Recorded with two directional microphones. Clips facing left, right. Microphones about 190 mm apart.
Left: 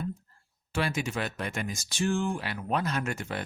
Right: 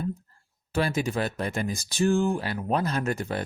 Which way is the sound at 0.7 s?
35° right (ahead or behind).